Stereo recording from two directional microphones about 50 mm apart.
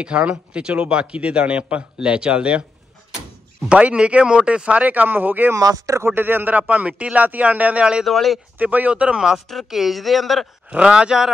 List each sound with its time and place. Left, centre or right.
0.0 s a man's voice: right
3.6 s a man's voice: right
5.5 s speech: right
6.0 s a man's voice: right
6.7 s a man's voice: right
8.0 s speech: centre
8.5 s a man's voice: right; by 9.4 s centre
9.5 s speech: centre
10.7 s speech: centre